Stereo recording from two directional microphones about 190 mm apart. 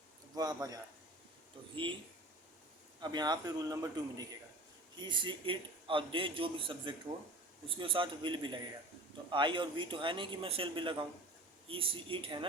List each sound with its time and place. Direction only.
0.3 s a man's voice: 20° right (ahead or behind)
3.0 s a man's voice: 20° right (ahead or behind)